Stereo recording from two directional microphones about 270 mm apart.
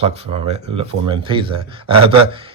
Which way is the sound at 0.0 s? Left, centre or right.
Right.